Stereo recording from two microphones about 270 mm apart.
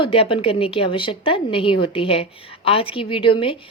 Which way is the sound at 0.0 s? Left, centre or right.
Centre.